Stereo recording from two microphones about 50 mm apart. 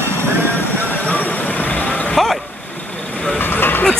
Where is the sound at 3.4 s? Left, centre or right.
Left.